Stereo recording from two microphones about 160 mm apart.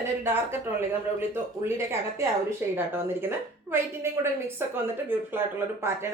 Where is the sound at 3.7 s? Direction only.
15° right (ahead or behind).